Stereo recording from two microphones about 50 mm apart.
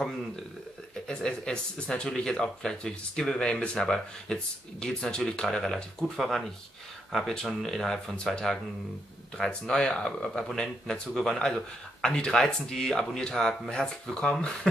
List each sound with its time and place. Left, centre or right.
1.0 s speech: centre